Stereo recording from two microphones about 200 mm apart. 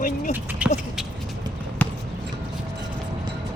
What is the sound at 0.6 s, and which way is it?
Speech, 5° right (ahead or behind).